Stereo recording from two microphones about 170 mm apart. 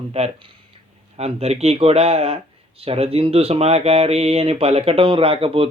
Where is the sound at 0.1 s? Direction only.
35° right (ahead or behind).